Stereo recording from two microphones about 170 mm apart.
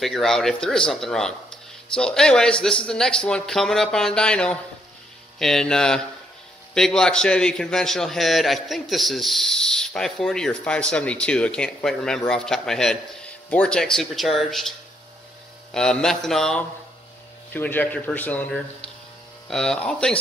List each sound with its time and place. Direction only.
0.0 s a man's voice: centre (ahead or behind)
15.7 s a man's voice: 5° left (ahead or behind)